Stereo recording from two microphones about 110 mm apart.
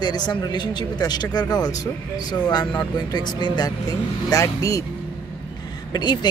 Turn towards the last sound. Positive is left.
turn(degrees=40)  # may be behind; listen again after turning